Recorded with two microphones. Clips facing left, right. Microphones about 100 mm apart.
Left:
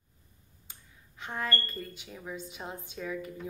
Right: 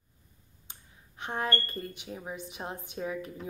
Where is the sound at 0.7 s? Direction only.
20° right (ahead or behind).